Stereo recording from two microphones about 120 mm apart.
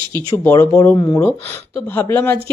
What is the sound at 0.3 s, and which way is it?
Speech, 25° left (ahead or behind).